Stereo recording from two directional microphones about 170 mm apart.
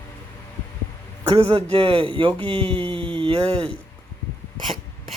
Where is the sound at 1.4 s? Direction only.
30° right (ahead or behind).